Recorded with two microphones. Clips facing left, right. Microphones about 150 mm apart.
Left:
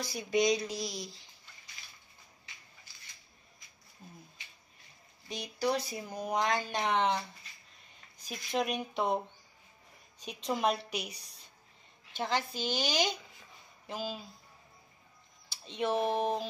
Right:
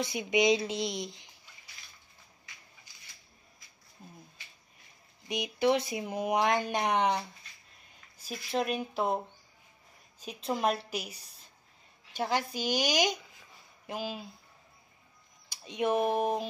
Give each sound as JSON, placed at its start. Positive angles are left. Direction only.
{"t": 0.0, "sound": "a woman's voice", "side_deg": -20}
{"t": 2.9, "sound": "a sound", "side_deg": -15}
{"t": 5.3, "sound": "a woman's voice", "side_deg": -20}
{"t": 10.2, "sound": "a woman's voice", "side_deg": -5}
{"t": 15.5, "sound": "speech", "side_deg": -10}